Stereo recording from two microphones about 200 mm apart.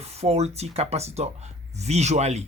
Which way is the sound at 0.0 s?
30° right (ahead or behind).